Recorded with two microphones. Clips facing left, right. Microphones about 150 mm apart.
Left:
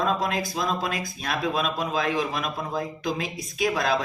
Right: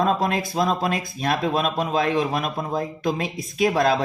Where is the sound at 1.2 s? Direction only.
45° right (ahead or behind).